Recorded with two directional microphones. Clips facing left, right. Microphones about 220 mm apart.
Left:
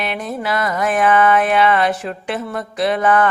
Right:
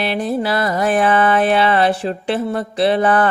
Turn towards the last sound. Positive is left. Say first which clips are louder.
# right 2 dB
turn(degrees=-30)  # may be behind; listen again after turning